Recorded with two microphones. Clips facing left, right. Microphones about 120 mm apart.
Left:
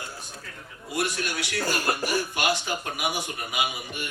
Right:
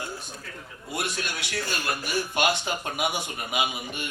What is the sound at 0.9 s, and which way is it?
Speech, 25° right (ahead or behind).